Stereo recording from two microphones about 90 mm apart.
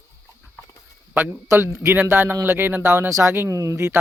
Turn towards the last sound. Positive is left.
turn(degrees=-35)  # may be behind; listen again after turning